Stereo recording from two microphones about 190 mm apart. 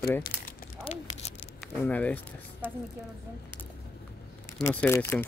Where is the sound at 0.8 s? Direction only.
35° left (ahead or behind).